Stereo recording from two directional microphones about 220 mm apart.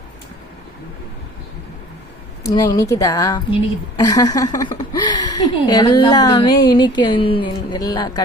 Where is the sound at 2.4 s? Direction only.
15° left (ahead or behind).